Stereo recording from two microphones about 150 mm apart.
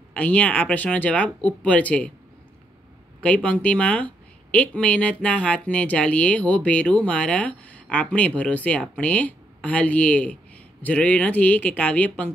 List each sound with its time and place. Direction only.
0.1 s speech: 10° left (ahead or behind)
3.2 s speech: 5° left (ahead or behind)